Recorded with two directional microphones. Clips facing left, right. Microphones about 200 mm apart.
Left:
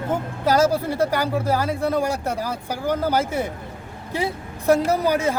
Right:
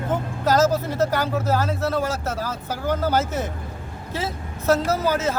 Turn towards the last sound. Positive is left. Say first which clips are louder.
# left 2 dB
turn(degrees=15)  # may be behind; listen again after turning